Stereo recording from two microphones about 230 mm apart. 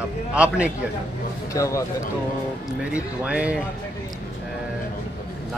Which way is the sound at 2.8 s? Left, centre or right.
Centre.